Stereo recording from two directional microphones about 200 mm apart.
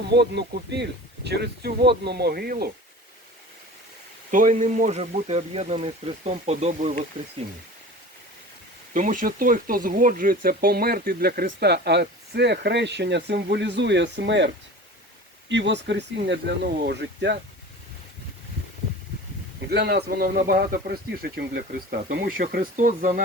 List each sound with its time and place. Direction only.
0.1 s speech: 55° right (ahead or behind)
4.3 s speech: 40° right (ahead or behind)
8.9 s speech: 40° right (ahead or behind); by 17.3 s 60° right (ahead or behind)
19.6 s speech: 55° right (ahead or behind)